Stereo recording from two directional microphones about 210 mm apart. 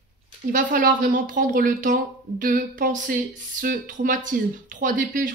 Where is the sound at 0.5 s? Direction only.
40° right (ahead or behind).